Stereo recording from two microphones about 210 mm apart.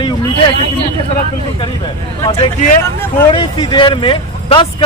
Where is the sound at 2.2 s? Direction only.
25° left (ahead or behind).